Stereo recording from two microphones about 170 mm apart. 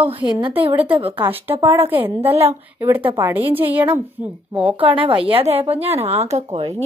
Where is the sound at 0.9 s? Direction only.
35° right (ahead or behind).